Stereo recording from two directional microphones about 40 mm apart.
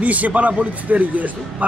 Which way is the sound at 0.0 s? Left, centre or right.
Right.